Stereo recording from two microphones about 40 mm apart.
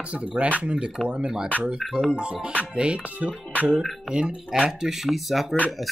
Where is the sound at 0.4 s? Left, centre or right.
Right.